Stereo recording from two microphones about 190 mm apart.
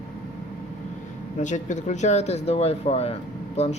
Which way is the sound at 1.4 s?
40° left (ahead or behind).